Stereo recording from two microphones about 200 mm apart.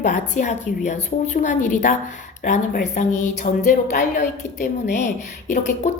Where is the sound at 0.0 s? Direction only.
40° left (ahead or behind).